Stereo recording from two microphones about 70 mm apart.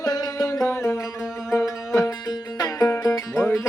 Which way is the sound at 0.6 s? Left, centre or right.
Left.